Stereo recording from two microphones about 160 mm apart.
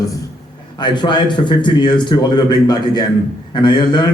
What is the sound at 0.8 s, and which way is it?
A man's voice, 30° left (ahead or behind).